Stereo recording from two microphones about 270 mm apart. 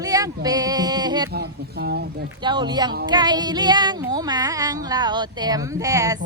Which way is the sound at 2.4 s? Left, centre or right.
Centre.